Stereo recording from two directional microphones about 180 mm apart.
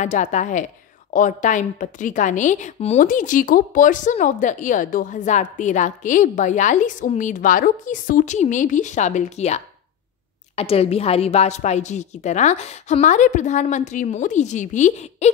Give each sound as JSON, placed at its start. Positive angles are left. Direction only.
{"t": 0.0, "sound": "a woman's voice", "side_deg": 45}